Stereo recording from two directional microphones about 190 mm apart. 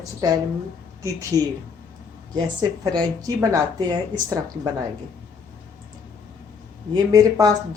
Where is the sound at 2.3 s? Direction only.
20° right (ahead or behind).